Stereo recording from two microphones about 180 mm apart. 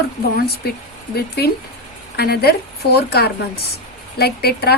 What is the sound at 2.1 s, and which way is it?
Speech, 60° left (ahead or behind).